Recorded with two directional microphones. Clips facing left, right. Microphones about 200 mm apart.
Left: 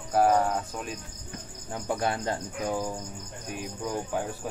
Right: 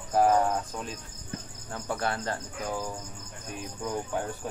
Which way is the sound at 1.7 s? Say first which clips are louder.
Left 2 dB; 15° left (ahead or behind).